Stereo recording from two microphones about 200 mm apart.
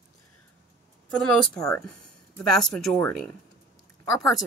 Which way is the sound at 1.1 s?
5° left (ahead or behind).